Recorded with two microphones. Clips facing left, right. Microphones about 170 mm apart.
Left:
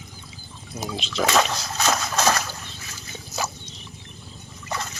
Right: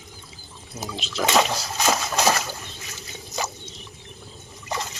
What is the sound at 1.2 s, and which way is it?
Splash, 10° right (ahead or behind).